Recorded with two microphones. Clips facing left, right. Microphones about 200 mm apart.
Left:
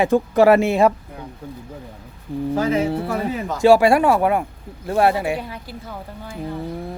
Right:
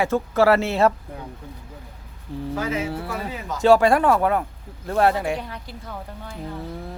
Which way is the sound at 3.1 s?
50° left (ahead or behind).